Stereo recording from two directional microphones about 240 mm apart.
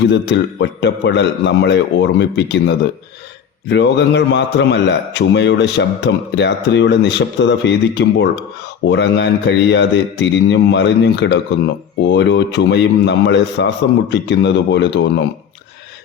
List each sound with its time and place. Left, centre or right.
0.1 s a man's voice: left